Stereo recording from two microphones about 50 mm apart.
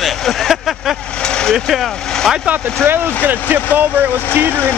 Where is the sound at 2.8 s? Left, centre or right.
Right.